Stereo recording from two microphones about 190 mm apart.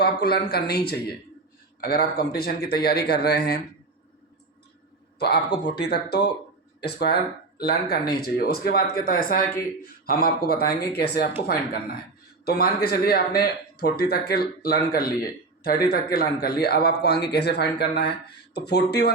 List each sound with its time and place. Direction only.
0.0 s a man's voice: 55° left (ahead or behind)
5.3 s a man's voice: 60° left (ahead or behind)